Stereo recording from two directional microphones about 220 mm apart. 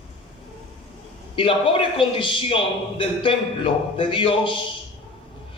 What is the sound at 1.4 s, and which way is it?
A man's voice, 25° left (ahead or behind).